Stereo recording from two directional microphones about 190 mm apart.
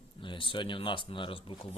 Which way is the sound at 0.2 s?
25° left (ahead or behind).